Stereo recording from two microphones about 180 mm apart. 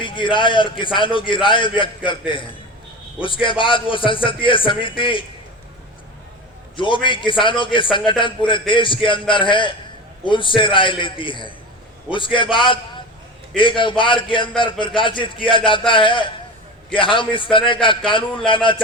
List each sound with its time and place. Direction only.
0.0 s a man's voice: 25° left (ahead or behind)
6.7 s a man's voice: 25° left (ahead or behind)